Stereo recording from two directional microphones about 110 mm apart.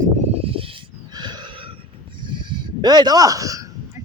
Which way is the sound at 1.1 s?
40° right (ahead or behind).